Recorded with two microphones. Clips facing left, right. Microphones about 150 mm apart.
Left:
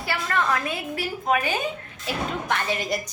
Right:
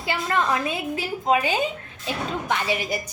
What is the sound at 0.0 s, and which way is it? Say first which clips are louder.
A woman's voice: right 2 dB; 20° right (ahead or behind).